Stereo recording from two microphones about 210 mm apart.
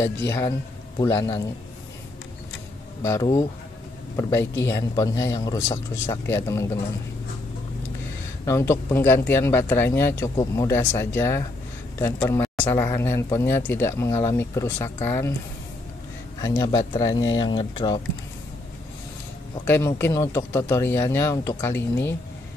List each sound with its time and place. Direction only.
0.9 s speech: 15° left (ahead or behind)
3.0 s speech: 15° left (ahead or behind)
4.6 s speech: 15° left (ahead or behind)
8.5 s speech: 15° left (ahead or behind)
16.3 s speech: 15° left (ahead or behind)
19.6 s speech: 10° left (ahead or behind)